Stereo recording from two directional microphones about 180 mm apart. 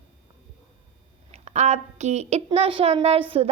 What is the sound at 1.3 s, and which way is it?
A woman's voice, 40° right (ahead or behind).